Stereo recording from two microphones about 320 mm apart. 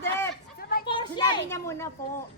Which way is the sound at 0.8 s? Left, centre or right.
Centre.